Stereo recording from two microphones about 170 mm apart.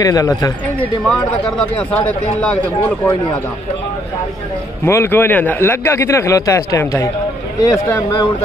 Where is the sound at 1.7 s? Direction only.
10° left (ahead or behind).